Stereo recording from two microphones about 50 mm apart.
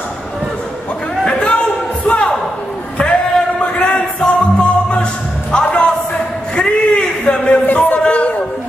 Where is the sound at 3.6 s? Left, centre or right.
Left.